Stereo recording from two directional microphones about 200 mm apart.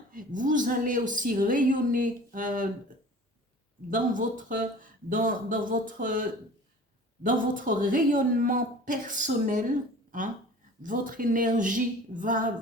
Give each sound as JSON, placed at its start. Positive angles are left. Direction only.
{"t": 0.1, "sound": "a woman's voice", "side_deg": -40}
{"t": 3.8, "sound": "a woman's voice", "side_deg": -40}
{"t": 10.8, "sound": "a woman's voice", "side_deg": -45}